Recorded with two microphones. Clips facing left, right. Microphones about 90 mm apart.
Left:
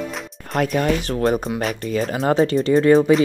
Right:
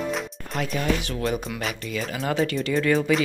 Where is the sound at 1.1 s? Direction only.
35° left (ahead or behind).